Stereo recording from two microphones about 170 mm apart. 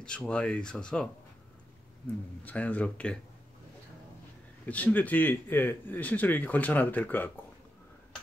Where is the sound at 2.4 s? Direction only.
10° left (ahead or behind).